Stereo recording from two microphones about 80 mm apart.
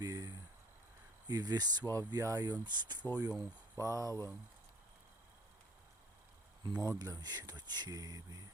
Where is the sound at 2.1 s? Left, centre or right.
Right.